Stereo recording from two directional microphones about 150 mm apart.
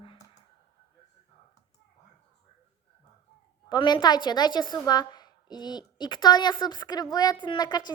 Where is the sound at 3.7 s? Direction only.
30° left (ahead or behind).